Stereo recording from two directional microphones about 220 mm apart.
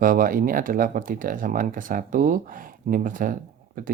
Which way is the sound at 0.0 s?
40° right (ahead or behind).